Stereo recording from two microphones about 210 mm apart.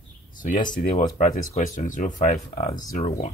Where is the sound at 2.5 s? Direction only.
20° left (ahead or behind).